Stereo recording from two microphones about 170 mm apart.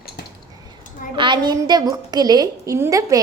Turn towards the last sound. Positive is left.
turn(degrees=-15)  # may be behind; listen again after turning